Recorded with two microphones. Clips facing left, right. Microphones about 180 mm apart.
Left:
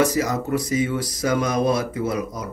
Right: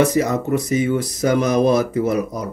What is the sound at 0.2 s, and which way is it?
Speech, 30° right (ahead or behind).